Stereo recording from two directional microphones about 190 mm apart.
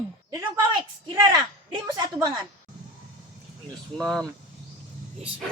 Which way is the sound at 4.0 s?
5° left (ahead or behind).